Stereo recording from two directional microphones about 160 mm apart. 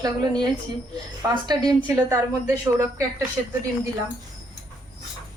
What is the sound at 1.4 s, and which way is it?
Speech, 25° right (ahead or behind).